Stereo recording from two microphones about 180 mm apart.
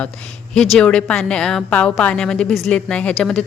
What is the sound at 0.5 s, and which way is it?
A woman's voice, 5° left (ahead or behind).